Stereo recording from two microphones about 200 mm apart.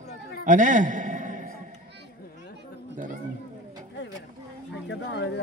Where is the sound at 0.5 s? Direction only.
40° right (ahead or behind).